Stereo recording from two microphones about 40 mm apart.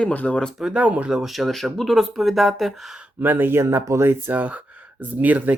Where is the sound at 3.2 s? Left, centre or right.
Right.